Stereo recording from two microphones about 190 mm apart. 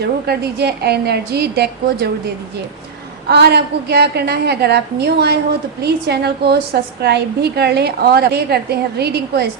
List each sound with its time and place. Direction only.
0.0 s a woman's voice: 60° right (ahead or behind)